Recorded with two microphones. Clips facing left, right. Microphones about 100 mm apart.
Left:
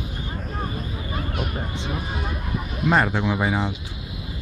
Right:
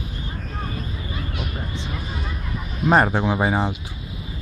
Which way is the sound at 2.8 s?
30° right (ahead or behind).